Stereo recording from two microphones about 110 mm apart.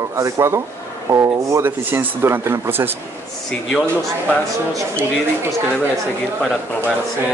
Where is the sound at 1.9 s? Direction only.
15° right (ahead or behind).